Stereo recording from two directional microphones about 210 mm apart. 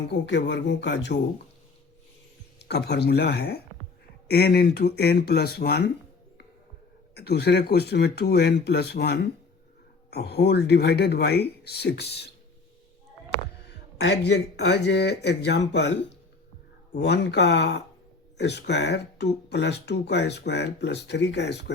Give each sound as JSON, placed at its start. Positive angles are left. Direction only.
{"t": 0.1, "sound": "speech", "side_deg": 55}
{"t": 2.6, "sound": "speech", "side_deg": 50}
{"t": 7.1, "sound": "speech", "side_deg": 50}
{"t": 13.7, "sound": "speech", "side_deg": 55}